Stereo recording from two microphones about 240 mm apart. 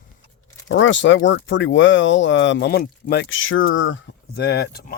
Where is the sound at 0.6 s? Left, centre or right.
Left.